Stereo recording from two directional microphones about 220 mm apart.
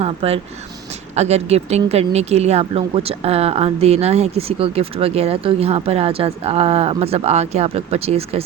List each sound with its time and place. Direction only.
0.0 s speech: 25° right (ahead or behind)